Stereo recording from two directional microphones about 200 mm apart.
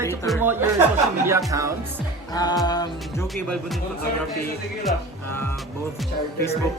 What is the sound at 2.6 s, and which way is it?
Music, 20° left (ahead or behind).